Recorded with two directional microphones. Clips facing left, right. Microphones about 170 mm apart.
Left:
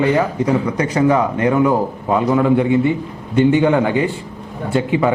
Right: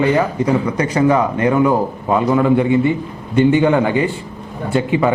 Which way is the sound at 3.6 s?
15° right (ahead or behind).